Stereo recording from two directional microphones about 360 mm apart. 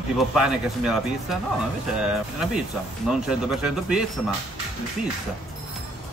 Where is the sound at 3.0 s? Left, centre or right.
Centre.